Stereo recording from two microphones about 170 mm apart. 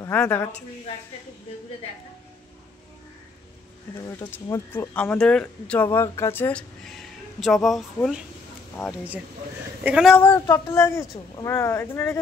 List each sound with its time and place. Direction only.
0.0 s a woman's voice: 10° left (ahead or behind)
4.3 s speech: 10° left (ahead or behind)
9.8 s speech: 5° right (ahead or behind)
10.1 s speech: 10° left (ahead or behind)